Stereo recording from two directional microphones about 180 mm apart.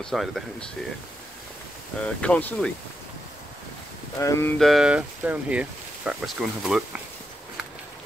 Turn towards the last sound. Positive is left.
turn(degrees=-5)  # may be behind; listen again after turning